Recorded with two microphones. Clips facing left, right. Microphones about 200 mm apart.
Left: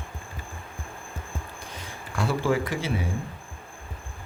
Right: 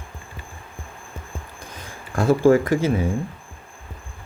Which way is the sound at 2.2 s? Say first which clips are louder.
Right 9 dB; 45° right (ahead or behind).